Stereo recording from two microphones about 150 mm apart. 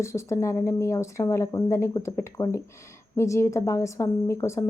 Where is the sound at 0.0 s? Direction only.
20° left (ahead or behind).